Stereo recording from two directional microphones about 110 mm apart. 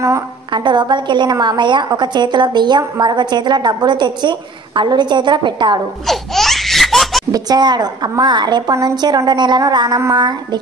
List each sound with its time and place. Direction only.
0.5 s a woman's voice: 45° right (ahead or behind)
6.0 s laughter: centre (ahead or behind)
7.3 s a woman's voice: 40° right (ahead or behind)